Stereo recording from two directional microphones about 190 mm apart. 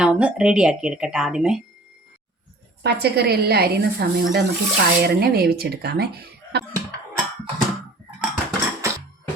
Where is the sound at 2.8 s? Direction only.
60° right (ahead or behind).